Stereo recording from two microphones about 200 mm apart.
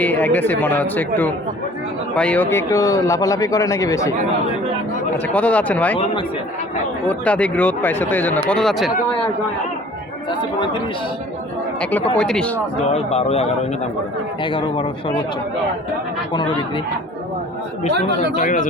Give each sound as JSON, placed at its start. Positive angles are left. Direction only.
{"t": 0.0, "sound": "speech", "side_deg": 10}
{"t": 5.3, "sound": "speech", "side_deg": 5}
{"t": 7.1, "sound": "speech", "side_deg": 5}
{"t": 11.8, "sound": "speech", "side_deg": 10}
{"t": 12.9, "sound": "speech", "side_deg": 30}
{"t": 16.3, "sound": "speech", "side_deg": 25}
{"t": 18.3, "sound": "speech", "side_deg": 40}